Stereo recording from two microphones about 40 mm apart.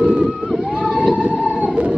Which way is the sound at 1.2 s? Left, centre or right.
Right.